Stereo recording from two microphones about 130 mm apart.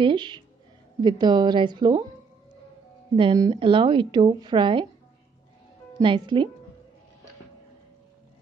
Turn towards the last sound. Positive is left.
turn(degrees=-40)  # may be behind; listen again after turning